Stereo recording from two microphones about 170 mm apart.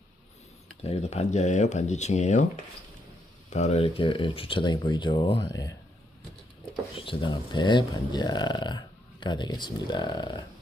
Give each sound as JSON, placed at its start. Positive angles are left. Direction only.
{"t": 0.8, "sound": "speech", "side_deg": 40}
{"t": 3.5, "sound": "speech", "side_deg": 40}
{"t": 6.9, "sound": "speech", "side_deg": 30}